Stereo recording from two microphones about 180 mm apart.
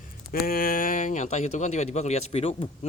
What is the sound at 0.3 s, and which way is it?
Speech, 55° left (ahead or behind).